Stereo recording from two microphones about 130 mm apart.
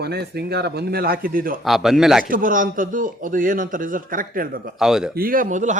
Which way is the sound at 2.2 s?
90° right.